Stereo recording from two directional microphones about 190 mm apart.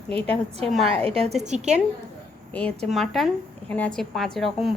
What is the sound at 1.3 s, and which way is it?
Speech, 35° right (ahead or behind).